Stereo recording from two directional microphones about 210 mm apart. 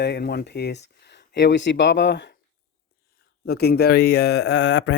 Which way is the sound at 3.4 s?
50° left (ahead or behind).